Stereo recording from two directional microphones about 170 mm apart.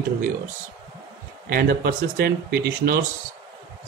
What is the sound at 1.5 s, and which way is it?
Speech, 60° right (ahead or behind).